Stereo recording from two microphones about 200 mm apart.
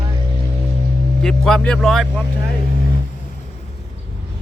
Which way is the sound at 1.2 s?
5° left (ahead or behind).